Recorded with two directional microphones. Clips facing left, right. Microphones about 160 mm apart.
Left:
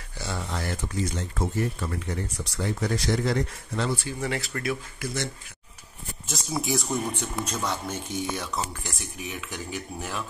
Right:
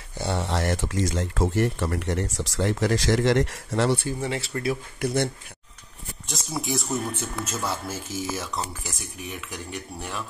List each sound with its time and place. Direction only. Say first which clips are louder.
0.2 s speech: right 6 dB; 70° right (ahead or behind)
4.2 s speech: right 2 dB; 25° right (ahead or behind)
5.0 s speech: right 8 dB; 55° right (ahead or behind)
6.2 s speech: left 1 dB; centre (ahead or behind)